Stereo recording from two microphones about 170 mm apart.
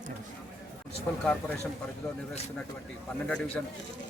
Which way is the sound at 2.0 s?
20° left (ahead or behind).